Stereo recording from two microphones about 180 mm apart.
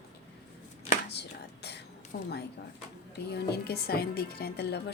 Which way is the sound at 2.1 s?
55° left (ahead or behind).